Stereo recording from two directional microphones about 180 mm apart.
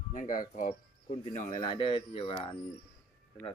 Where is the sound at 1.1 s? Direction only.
40° left (ahead or behind).